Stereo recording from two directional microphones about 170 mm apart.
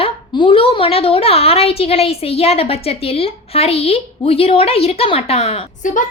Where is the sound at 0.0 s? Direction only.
30° left (ahead or behind).